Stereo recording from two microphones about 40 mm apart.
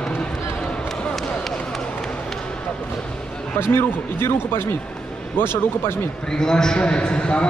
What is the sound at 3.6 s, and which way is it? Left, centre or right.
A man's voice, left.